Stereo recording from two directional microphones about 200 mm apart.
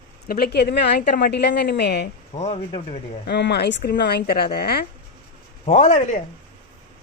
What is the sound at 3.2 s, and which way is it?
A woman's voice, 55° left (ahead or behind).